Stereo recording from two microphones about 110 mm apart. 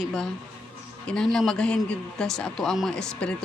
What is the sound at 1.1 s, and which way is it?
Speech, 5° left (ahead or behind).